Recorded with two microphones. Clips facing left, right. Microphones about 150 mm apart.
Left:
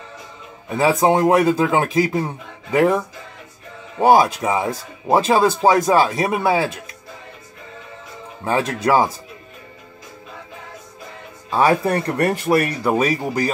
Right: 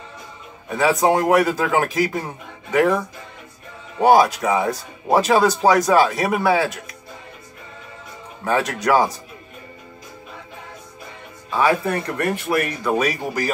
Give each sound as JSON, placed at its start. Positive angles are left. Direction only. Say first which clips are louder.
{"t": 0.7, "sound": "speech", "louder": "left 1 dB", "side_deg": 25}
{"t": 4.0, "sound": "speech", "louder": "even", "side_deg": 25}
{"t": 8.5, "sound": "speech", "louder": "left 1 dB", "side_deg": 25}
{"t": 11.5, "sound": "speech", "louder": "left 2 dB", "side_deg": 35}